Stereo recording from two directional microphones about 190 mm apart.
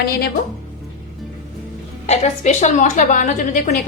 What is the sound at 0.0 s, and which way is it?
Speech, 55° left (ahead or behind).